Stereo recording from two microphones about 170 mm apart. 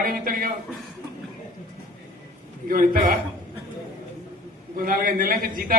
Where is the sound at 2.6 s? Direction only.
55° right (ahead or behind).